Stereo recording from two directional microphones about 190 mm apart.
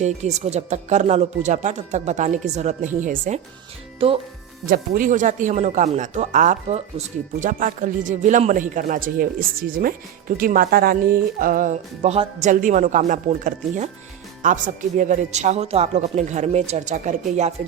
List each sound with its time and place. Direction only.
0.0 s speech: 35° right (ahead or behind)
4.6 s speech: 50° right (ahead or behind)